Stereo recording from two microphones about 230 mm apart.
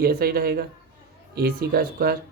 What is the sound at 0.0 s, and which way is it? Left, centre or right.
Speech, right.